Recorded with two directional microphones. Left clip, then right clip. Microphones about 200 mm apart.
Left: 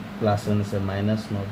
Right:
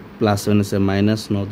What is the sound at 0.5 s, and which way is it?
Speech, 65° right (ahead or behind).